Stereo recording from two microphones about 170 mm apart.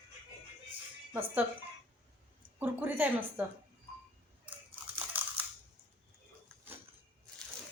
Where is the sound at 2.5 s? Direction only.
10° right (ahead or behind).